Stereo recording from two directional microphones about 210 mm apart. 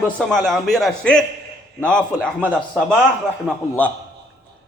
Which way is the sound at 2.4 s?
5° right (ahead or behind).